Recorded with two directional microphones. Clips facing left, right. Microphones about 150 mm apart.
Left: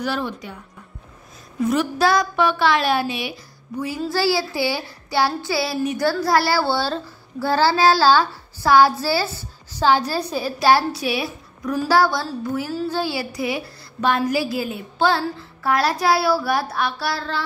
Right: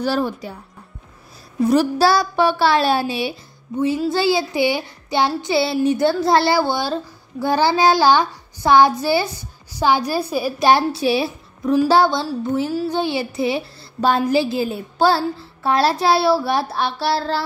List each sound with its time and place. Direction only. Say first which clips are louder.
0.0 s speech: right 4 dB; 35° right (ahead or behind)
1.6 s speech: right 4 dB; 35° right (ahead or behind)
4.1 s a sound: right 2 dB; 20° right (ahead or behind)